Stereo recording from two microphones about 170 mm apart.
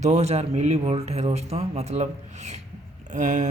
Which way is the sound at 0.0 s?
40° right (ahead or behind).